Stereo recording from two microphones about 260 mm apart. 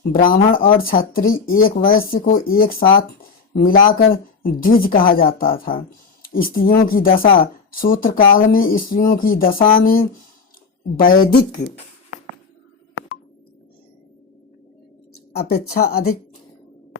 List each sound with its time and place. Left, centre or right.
0.1 s speech: left
15.3 s speech: left